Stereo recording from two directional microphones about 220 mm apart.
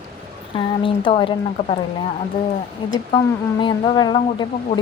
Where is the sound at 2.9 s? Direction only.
20° left (ahead or behind).